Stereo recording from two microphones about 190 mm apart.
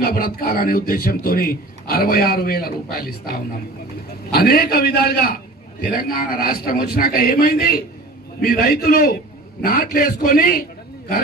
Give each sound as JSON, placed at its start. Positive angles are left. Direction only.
{"t": 0.0, "sound": "a man's voice", "side_deg": 50}